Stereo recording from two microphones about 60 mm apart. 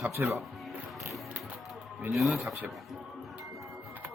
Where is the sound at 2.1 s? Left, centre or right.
Centre.